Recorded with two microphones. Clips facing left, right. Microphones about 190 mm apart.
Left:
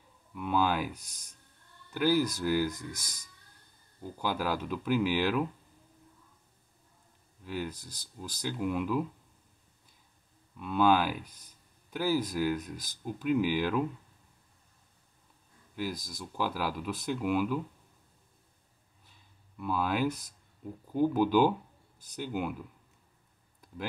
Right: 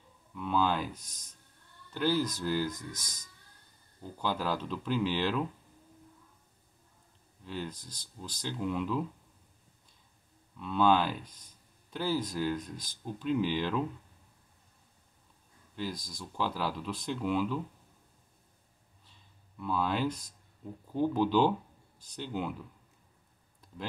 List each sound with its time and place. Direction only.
0.3 s speech: 15° left (ahead or behind)
2.0 s speech: 10° left (ahead or behind)
4.0 s speech: 10° left (ahead or behind)
7.4 s speech: 10° left (ahead or behind)
10.6 s speech: 10° left (ahead or behind)
15.7 s speech: 5° left (ahead or behind)
19.5 s speech: 10° left (ahead or behind)